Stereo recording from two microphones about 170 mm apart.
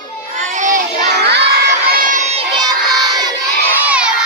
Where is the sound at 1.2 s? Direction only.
80° right.